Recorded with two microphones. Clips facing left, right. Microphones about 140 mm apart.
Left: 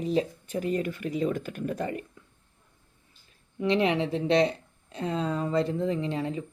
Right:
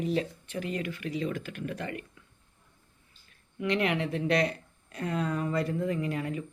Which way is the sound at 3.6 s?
30° left (ahead or behind).